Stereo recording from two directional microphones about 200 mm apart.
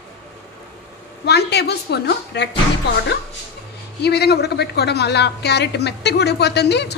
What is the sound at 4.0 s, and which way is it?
A woman's voice, 55° left (ahead or behind).